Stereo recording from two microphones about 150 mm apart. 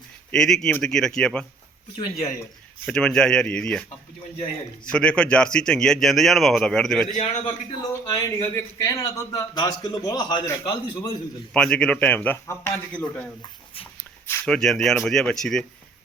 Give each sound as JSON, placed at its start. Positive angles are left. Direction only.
{"t": 0.3, "sound": "a man's voice", "side_deg": 5}
{"t": 2.0, "sound": "a man's voice", "side_deg": 20}
{"t": 2.8, "sound": "a man's voice", "side_deg": 5}
{"t": 4.9, "sound": "a man's voice", "side_deg": 5}
{"t": 7.1, "sound": "a man's voice", "side_deg": 50}
{"t": 7.8, "sound": "a man's voice", "side_deg": 25}
{"t": 11.5, "sound": "speech", "side_deg": 5}
{"t": 14.4, "sound": "a man's voice", "side_deg": 5}